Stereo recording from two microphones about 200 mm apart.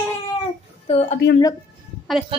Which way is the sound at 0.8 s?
35° left (ahead or behind).